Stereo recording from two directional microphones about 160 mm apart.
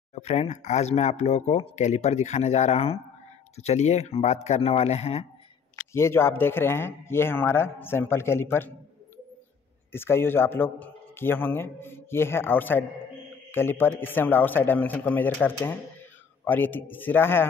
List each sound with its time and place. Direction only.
0.1 s speech: 45° left (ahead or behind)
5.9 s a man's voice: 15° left (ahead or behind)